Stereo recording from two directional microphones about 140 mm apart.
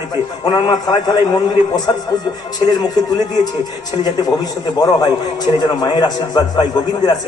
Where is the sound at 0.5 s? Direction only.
30° left (ahead or behind).